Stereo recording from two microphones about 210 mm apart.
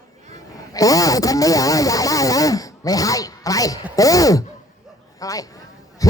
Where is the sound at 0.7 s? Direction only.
15° left (ahead or behind).